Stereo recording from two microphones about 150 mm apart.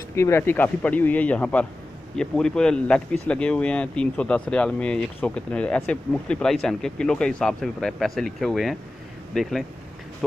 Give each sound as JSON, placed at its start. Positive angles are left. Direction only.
{"t": 0.1, "sound": "speech", "side_deg": 15}